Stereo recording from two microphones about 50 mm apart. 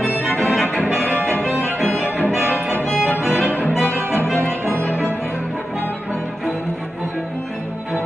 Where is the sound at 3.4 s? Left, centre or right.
Left.